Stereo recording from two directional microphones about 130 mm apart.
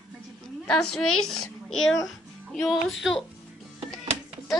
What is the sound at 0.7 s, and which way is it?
A child's voice, 5° left (ahead or behind).